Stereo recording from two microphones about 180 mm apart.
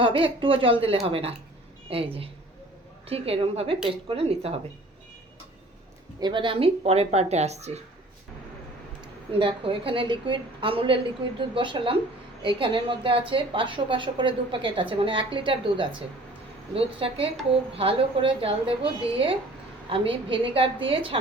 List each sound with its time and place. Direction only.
0.0 s a woman's voice: 30° right (ahead or behind)
3.1 s speech: 35° right (ahead or behind)
6.1 s speech: 25° right (ahead or behind)
9.4 s a woman's voice: 30° right (ahead or behind)